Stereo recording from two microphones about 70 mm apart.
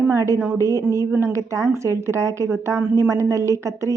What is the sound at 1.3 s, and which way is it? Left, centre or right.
A woman's voice, right.